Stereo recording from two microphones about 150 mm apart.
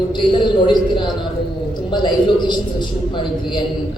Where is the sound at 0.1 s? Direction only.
30° left (ahead or behind).